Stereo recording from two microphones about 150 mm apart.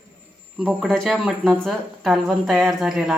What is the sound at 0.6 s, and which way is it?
Speech, centre (ahead or behind).